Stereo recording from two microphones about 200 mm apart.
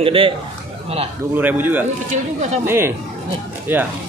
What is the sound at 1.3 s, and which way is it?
Speech, 10° right (ahead or behind).